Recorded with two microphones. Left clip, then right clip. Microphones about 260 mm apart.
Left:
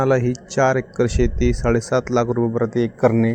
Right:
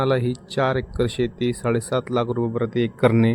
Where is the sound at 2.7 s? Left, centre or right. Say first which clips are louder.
Right 1 dB; right.